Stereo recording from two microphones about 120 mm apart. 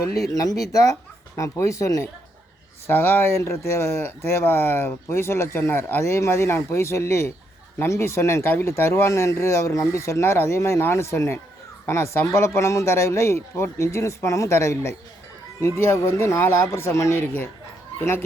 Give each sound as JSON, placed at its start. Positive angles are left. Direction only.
{"t": 0.3, "sound": "speech", "side_deg": 30}